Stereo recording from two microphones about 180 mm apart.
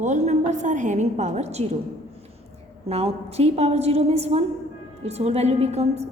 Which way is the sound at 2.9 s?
35° right (ahead or behind).